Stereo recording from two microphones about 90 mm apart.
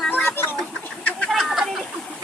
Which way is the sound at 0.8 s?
15° left (ahead or behind).